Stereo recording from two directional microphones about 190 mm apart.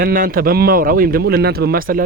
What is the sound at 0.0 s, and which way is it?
Speech, 50° right (ahead or behind).